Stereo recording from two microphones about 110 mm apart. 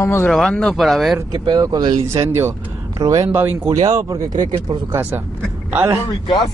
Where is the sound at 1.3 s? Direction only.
40° right (ahead or behind).